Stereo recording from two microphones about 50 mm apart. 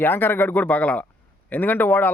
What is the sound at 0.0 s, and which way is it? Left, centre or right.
Speech, left.